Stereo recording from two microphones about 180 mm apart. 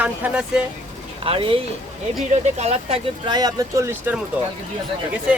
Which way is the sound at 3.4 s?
20° right (ahead or behind).